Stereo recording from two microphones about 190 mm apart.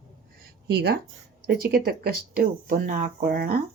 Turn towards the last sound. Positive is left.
turn(degrees=-50)  # may be behind; listen again after turning